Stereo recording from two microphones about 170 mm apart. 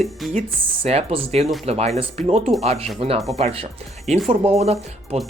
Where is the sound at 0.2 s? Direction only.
Centre (ahead or behind).